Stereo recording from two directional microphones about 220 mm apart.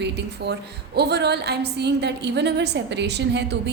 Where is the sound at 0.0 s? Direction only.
50° right (ahead or behind).